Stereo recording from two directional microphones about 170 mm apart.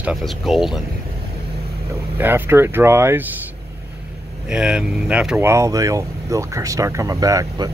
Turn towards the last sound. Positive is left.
turn(degrees=-20)  # may be behind; listen again after turning